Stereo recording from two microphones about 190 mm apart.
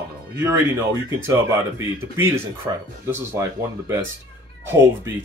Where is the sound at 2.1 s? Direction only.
15° right (ahead or behind).